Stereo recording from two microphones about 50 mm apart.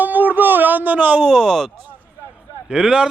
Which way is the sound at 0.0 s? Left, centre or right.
Right.